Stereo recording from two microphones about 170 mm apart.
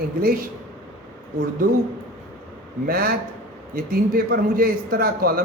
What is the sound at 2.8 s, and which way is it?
A man's voice, 65° right (ahead or behind).